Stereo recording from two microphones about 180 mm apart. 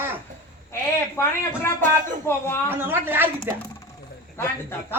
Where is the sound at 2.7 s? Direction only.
10° right (ahead or behind).